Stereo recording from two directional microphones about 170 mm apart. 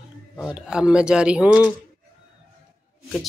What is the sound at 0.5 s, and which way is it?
Speech, 5° right (ahead or behind).